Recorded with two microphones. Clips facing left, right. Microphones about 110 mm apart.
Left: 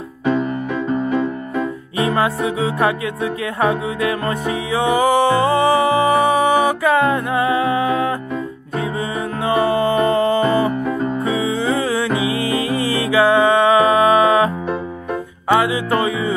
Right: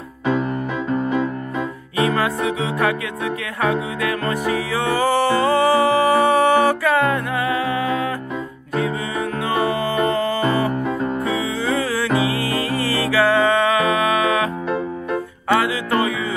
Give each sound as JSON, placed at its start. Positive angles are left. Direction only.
{"t": 2.0, "sound": "music", "side_deg": 25}
{"t": 9.5, "sound": "music", "side_deg": 25}
{"t": 15.5, "sound": "music", "side_deg": 20}